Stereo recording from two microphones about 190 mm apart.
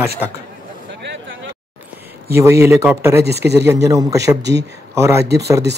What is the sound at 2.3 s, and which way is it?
A man's voice, 15° right (ahead or behind).